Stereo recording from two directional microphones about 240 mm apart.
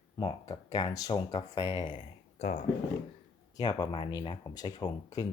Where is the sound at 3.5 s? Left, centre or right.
Centre.